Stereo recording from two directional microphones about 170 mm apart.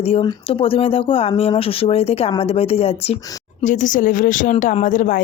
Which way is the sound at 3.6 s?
45° left (ahead or behind).